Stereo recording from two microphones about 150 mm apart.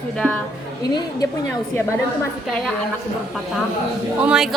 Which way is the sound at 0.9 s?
25° left (ahead or behind).